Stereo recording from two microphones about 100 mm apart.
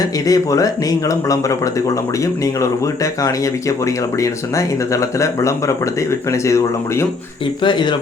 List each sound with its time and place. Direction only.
0.0 s speech: 35° left (ahead or behind)
7.6 s speech: 50° left (ahead or behind)